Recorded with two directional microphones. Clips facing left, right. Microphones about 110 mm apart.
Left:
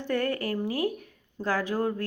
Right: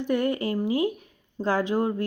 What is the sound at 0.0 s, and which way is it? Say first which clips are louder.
Speech: right 3 dB; 15° right (ahead or behind).